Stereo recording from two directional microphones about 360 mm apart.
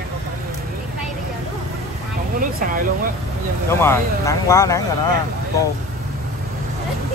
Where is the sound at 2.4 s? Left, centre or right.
Right.